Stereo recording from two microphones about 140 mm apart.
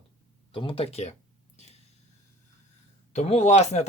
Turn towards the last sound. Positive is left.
turn(degrees=55)  # may be behind; listen again after turning